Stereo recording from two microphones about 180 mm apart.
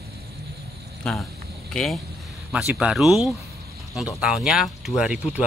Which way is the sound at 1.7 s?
Centre (ahead or behind).